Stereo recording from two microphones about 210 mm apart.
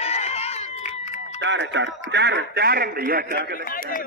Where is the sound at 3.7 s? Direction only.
40° left (ahead or behind).